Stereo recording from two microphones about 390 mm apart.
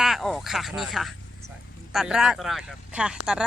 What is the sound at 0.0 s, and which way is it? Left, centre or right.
Speech, centre.